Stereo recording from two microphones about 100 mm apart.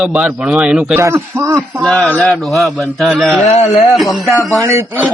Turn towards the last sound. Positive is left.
turn(degrees=-30)  # may be behind; listen again after turning